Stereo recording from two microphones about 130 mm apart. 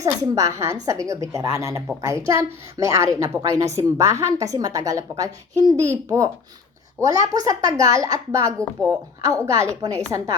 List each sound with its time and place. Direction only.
0.0 s a woman's voice: 25° right (ahead or behind)